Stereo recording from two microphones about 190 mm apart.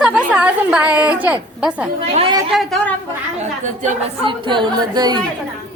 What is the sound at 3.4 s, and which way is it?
Speech, 40° right (ahead or behind).